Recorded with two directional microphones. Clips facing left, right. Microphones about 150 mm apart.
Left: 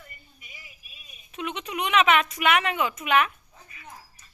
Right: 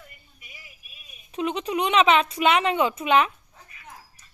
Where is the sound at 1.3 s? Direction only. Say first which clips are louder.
Right 6 dB; 35° right (ahead or behind).